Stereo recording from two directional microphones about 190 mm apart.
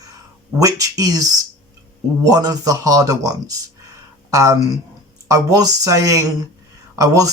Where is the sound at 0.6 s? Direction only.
20° right (ahead or behind).